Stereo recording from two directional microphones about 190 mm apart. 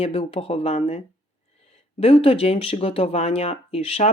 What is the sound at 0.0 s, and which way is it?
Speech, 30° left (ahead or behind).